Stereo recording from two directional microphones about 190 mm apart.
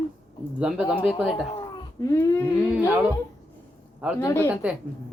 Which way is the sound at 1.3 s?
25° left (ahead or behind).